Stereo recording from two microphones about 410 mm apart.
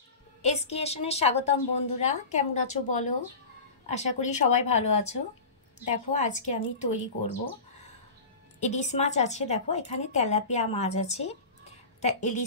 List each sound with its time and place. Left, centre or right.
0.4 s a woman's voice: centre
8.5 s a woman's voice: centre